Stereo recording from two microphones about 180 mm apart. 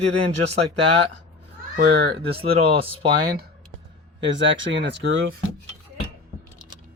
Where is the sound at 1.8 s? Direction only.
60° right (ahead or behind).